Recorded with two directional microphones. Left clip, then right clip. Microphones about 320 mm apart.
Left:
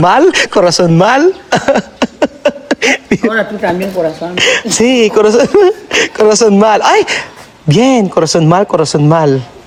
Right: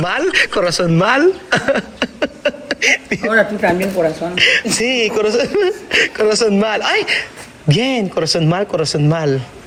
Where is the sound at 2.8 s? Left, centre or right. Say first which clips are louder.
Left 3 dB; left.